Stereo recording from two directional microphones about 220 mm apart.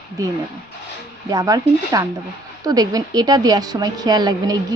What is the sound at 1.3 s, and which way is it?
A woman's voice, 15° right (ahead or behind).